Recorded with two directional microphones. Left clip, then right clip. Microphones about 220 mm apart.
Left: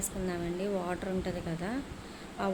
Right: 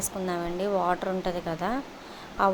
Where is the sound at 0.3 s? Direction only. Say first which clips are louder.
Right 6 dB; 15° right (ahead or behind).